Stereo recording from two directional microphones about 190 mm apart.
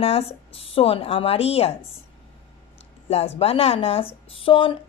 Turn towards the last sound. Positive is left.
turn(degrees=30)  # may be behind; listen again after turning